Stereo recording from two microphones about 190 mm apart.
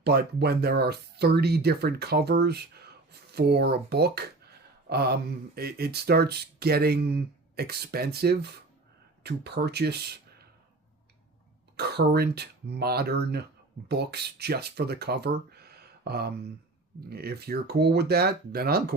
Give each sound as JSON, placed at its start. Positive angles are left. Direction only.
{"t": 0.0, "sound": "speech", "side_deg": -60}
{"t": 11.8, "sound": "speech", "side_deg": -60}